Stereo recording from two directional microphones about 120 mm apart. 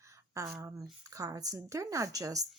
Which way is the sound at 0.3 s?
25° right (ahead or behind).